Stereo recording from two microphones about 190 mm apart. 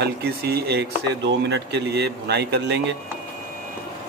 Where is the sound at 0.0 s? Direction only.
55° right (ahead or behind).